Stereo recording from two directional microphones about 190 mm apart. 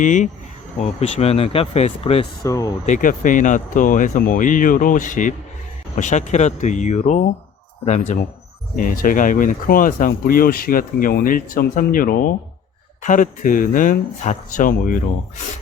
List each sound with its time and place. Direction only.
0.0 s speech: 40° left (ahead or behind)
2.4 s speech: 20° left (ahead or behind)
2.8 s speech: 40° left (ahead or behind)